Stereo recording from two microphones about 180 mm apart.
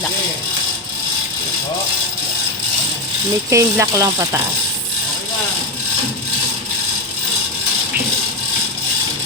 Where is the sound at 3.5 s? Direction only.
15° right (ahead or behind).